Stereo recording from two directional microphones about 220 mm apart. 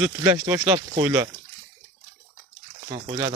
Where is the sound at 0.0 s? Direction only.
10° right (ahead or behind).